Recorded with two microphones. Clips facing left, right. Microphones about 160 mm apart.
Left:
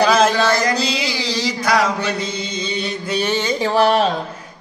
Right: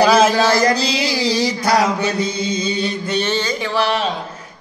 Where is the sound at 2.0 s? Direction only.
10° right (ahead or behind).